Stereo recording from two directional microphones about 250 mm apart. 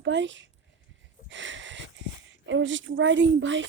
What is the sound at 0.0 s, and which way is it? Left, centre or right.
Speech, right.